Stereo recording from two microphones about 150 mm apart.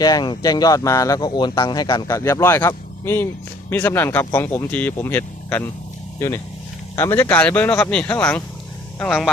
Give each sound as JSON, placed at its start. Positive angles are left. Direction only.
{"t": 0.0, "sound": "speech", "side_deg": 25}